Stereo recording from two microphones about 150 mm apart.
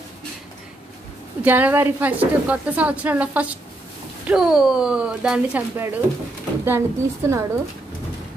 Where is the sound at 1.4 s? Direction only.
10° right (ahead or behind).